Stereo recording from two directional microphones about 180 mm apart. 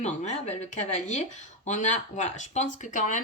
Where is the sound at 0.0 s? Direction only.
40° left (ahead or behind).